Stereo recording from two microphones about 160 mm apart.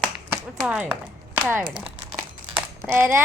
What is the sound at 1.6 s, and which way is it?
Speech, 35° right (ahead or behind).